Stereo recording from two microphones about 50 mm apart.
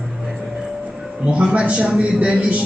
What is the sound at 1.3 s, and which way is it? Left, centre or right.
A man's voice, right.